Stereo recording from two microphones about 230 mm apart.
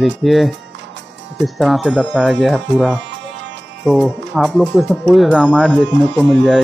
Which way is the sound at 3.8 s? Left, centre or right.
Centre.